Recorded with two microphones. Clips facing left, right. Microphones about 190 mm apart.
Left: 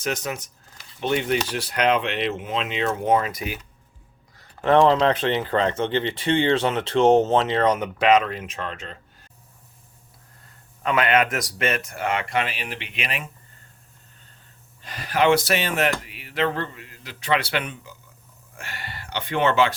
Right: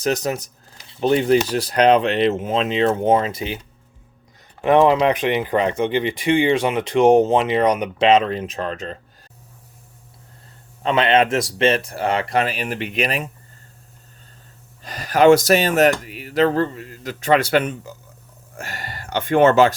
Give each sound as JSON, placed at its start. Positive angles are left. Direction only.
{"t": 0.0, "sound": "speech", "side_deg": -35}
{"t": 4.4, "sound": "speech", "side_deg": -15}
{"t": 10.8, "sound": "speech", "side_deg": -30}
{"t": 14.8, "sound": "speech", "side_deg": -40}